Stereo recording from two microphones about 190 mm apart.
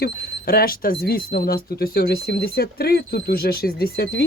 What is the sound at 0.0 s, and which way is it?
Speech, 55° left (ahead or behind).